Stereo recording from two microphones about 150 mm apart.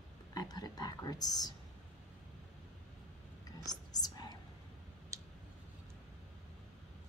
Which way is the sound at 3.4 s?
25° left (ahead or behind).